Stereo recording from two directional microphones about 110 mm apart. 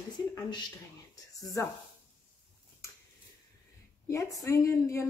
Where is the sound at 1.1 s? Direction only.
30° left (ahead or behind).